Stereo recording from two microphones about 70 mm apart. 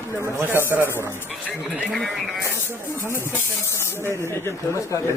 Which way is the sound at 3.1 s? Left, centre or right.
Left.